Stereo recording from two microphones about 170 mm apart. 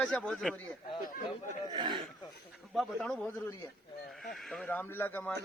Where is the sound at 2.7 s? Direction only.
Centre (ahead or behind).